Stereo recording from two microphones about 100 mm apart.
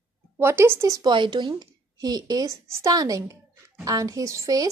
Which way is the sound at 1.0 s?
50° right (ahead or behind).